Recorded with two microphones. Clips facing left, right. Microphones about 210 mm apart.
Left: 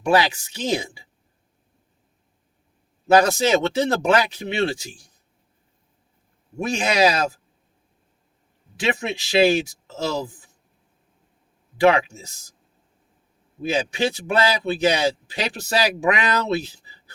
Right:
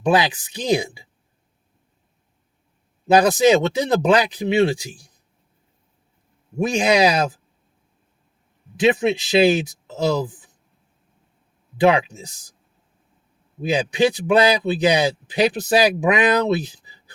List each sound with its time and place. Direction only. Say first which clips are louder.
0.0 s a man's voice: right 1 dB; 15° right (ahead or behind)
3.1 s a man's voice: right 3 dB; 15° right (ahead or behind)
6.6 s a man's voice: right 3 dB; 15° right (ahead or behind)
8.7 s speech: right 7 dB; 20° right (ahead or behind)
11.8 s a man's voice: right 1 dB; 15° right (ahead or behind)
13.6 s a man's voice: right 4 dB; 15° right (ahead or behind)